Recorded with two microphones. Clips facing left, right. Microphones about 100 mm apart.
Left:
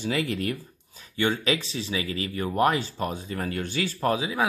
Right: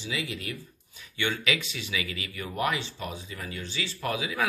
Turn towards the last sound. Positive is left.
turn(degrees=30)  # may be behind; listen again after turning